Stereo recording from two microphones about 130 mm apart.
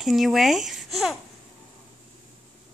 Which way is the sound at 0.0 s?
Centre (ahead or behind).